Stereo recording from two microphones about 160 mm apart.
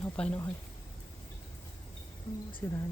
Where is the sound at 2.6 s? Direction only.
15° left (ahead or behind).